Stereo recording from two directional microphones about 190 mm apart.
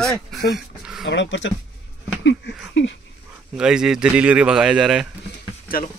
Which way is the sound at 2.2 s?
75° left (ahead or behind).